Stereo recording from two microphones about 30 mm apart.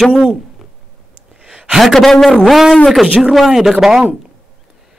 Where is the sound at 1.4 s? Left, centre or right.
Right.